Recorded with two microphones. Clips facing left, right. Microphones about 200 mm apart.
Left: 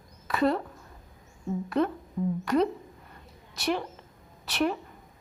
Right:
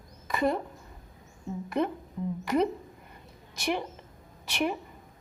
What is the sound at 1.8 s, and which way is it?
Speech, 20° right (ahead or behind).